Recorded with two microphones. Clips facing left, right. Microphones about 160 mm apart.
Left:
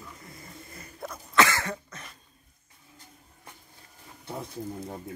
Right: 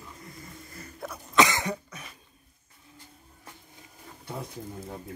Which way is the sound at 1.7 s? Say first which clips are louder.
Right 2 dB; 5° right (ahead or behind).